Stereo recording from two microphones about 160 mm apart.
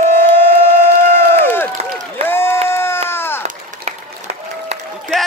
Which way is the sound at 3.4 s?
40° right (ahead or behind).